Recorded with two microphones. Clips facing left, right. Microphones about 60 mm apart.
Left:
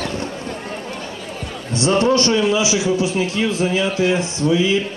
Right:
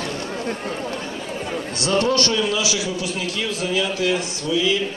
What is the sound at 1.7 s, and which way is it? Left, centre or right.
A man's voice, left.